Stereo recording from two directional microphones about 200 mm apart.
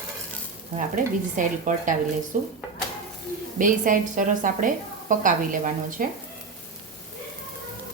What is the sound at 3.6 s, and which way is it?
A woman's voice, 40° right (ahead or behind).